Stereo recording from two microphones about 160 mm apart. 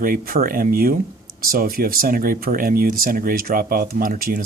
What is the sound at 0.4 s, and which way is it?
Speech, 65° right (ahead or behind).